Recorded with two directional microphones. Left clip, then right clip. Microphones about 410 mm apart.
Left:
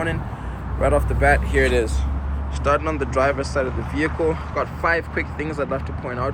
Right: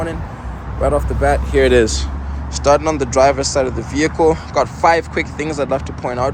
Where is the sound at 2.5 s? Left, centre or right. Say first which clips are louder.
Right 7 dB; centre.